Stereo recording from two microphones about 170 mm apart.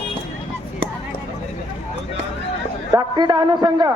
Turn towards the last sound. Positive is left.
turn(degrees=-25)  # may be behind; listen again after turning